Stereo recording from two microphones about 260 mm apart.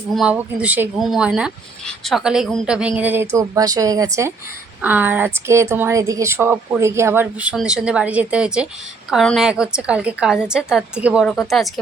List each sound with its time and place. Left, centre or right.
0.1 s speech: centre